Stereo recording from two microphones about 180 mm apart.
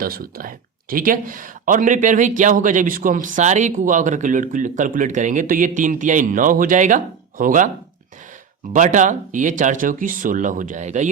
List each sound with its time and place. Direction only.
0.0 s speech: 55° right (ahead or behind)
8.7 s speech: 45° right (ahead or behind)